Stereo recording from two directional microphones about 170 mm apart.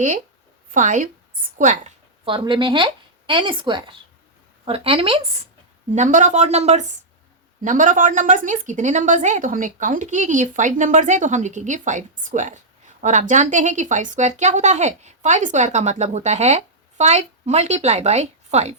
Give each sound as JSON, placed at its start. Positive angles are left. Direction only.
{"t": 0.7, "sound": "speech", "side_deg": -50}
{"t": 2.2, "sound": "a woman's voice", "side_deg": -30}
{"t": 5.9, "sound": "speech", "side_deg": -45}